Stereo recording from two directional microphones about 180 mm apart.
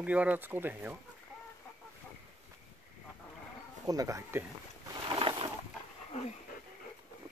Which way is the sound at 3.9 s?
20° right (ahead or behind).